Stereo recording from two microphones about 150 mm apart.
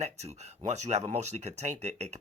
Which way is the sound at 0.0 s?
45° right (ahead or behind).